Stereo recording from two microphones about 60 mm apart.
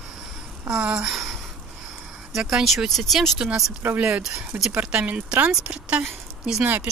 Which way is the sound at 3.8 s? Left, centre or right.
Right.